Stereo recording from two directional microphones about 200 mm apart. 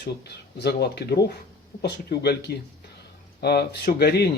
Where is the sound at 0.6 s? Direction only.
55° left (ahead or behind).